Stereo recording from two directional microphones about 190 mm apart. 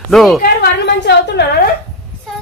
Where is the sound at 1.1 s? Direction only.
60° left (ahead or behind).